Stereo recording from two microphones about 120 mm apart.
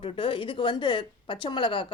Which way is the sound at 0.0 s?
45° left (ahead or behind).